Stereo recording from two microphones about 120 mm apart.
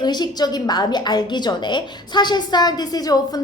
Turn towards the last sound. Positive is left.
turn(degrees=30)  # may be behind; listen again after turning